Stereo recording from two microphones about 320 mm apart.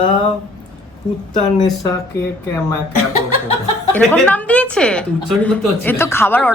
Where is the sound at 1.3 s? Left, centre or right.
Centre.